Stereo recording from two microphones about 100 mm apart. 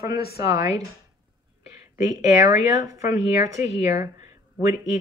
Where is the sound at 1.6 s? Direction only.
35° right (ahead or behind).